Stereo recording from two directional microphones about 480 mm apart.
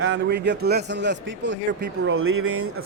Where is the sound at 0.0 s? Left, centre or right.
Right.